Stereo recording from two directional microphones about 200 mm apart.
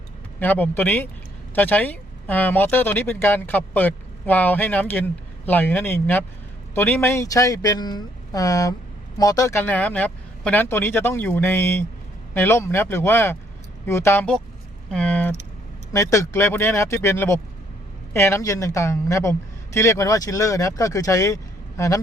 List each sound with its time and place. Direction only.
0.3 s speech: 10° left (ahead or behind)
14.8 s a sound: 5° left (ahead or behind)
15.9 s a woman's voice: 15° left (ahead or behind)